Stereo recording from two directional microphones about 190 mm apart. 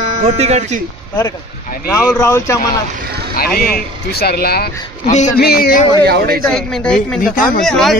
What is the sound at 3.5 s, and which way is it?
A man's voice, 50° left (ahead or behind).